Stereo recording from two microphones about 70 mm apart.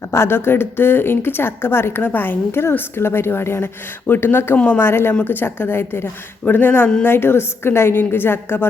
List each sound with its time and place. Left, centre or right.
0.1 s a woman's voice: left
4.5 s a woman's voice: centre
4.8 s a woman's voice: left